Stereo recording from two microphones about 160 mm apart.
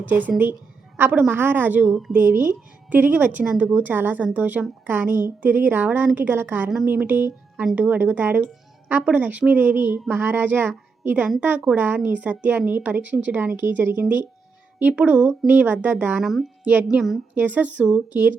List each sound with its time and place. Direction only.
0.0 s speech: 10° right (ahead or behind)